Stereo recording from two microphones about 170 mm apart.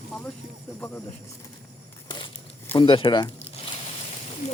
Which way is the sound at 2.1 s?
25° left (ahead or behind).